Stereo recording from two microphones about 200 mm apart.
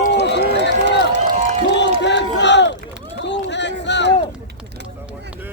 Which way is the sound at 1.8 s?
60° left (ahead or behind).